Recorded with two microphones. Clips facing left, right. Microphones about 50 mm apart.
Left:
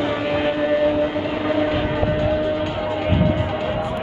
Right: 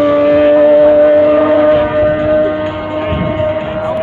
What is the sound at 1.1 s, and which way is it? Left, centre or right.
Vehicle, right.